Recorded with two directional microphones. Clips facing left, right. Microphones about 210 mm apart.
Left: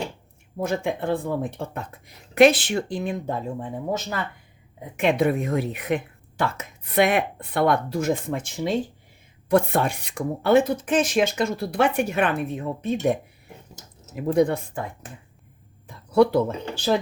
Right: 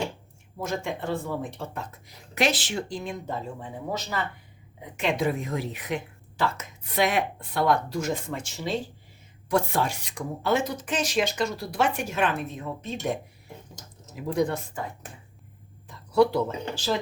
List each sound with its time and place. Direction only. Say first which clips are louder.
0.6 s speech: left 5 dB; 55° left (ahead or behind)
14.2 s speech: left 6 dB; 55° left (ahead or behind)
15.9 s speech: left 3 dB; 55° left (ahead or behind)